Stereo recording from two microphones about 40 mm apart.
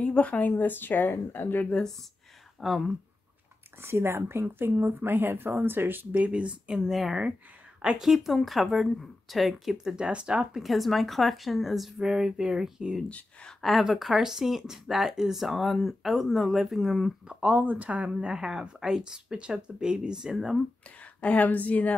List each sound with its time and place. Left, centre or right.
0.0 s a woman's voice: left
2.6 s speech: centre
3.8 s speech: right
4.7 s speech: right
6.1 s speech: right
6.7 s speech: centre
8.0 s speech: centre
9.9 s speech: right
10.6 s speech: centre
13.6 s speech: centre
17.3 s speech: right
17.6 s speech: right
18.2 s speech: centre
21.0 s a woman's voice: left